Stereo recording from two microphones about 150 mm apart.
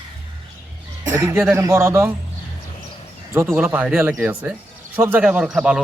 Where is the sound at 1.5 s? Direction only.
15° right (ahead or behind).